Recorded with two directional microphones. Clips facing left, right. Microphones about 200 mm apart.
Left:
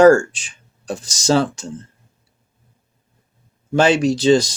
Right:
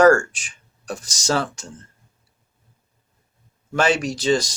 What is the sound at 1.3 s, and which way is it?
Speech, 30° left (ahead or behind).